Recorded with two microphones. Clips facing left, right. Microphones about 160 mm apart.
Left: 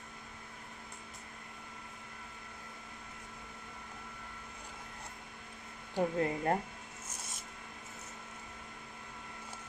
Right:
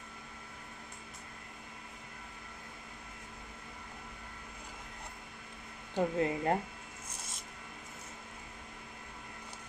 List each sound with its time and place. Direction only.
5.9 s speech: 20° right (ahead or behind)